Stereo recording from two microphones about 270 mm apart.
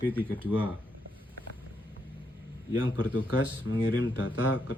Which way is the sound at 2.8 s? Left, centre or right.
Left.